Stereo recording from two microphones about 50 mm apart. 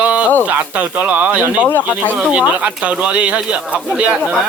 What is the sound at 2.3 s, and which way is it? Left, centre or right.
Speech, right.